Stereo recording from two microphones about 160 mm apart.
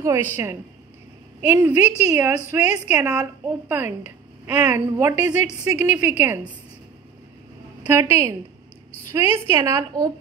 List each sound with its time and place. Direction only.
0.0 s a woman's voice: 15° right (ahead or behind)
7.8 s a woman's voice: 15° right (ahead or behind)
9.6 s a woman's voice: 20° right (ahead or behind)